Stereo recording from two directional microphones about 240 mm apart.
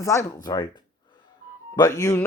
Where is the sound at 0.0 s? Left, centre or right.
Centre.